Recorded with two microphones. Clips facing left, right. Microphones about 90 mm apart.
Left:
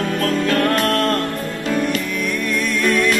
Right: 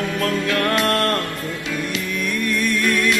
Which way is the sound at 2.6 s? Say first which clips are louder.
Left 3 dB; centre (ahead or behind).